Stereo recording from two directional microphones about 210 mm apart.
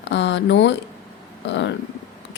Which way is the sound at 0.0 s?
55° left (ahead or behind).